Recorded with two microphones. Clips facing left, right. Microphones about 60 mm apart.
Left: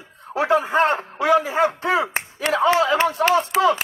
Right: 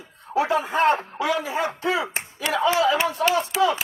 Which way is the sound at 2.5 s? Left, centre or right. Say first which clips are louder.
Left 3 dB; left.